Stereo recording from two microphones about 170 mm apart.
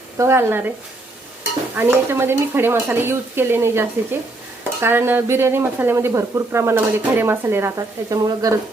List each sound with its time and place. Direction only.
0.2 s speech: 15° right (ahead or behind)
1.7 s speech: 15° right (ahead or behind)